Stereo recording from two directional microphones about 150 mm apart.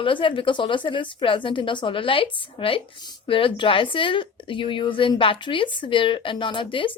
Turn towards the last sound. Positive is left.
turn(degrees=35)  # may be behind; listen again after turning